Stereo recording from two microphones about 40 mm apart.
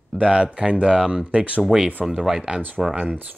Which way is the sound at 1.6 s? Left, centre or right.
Centre.